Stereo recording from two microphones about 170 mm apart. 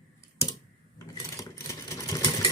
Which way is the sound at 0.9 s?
20° left (ahead or behind).